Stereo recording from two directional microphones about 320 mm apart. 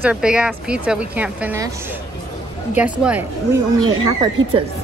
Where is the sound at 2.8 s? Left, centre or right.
Centre.